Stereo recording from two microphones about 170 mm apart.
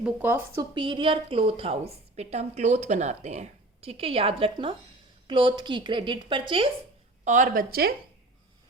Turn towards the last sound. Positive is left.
turn(degrees=-60)  # may be behind; listen again after turning